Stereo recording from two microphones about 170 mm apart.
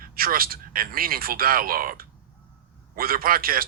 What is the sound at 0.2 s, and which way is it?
Speech, 60° right (ahead or behind).